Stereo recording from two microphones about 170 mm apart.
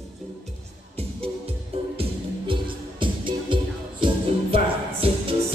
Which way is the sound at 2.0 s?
30° right (ahead or behind).